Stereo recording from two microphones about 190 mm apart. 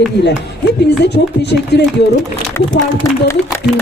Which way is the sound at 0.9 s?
60° left (ahead or behind).